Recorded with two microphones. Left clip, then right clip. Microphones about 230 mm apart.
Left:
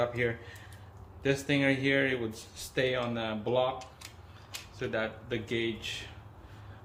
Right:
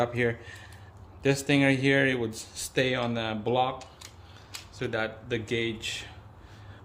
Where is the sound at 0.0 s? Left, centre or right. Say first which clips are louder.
Right 3 dB; right.